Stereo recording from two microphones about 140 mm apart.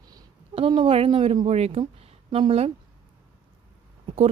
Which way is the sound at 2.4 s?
40° right (ahead or behind).